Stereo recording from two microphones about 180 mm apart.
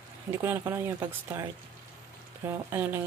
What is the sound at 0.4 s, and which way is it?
Speech, 15° right (ahead or behind).